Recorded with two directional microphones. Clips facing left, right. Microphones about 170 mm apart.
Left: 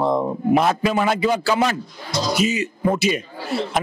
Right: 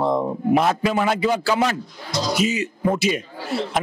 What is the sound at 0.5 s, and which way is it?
Speech, 10° left (ahead or behind).